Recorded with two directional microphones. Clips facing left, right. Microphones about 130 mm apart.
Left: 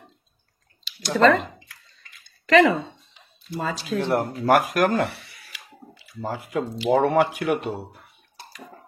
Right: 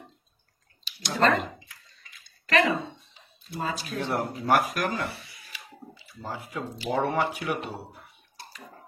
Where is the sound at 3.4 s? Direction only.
90° left.